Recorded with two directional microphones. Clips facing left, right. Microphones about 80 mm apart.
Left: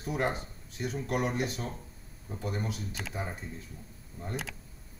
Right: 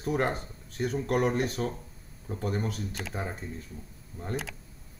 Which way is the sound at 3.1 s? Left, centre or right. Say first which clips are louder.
Right 2 dB; right.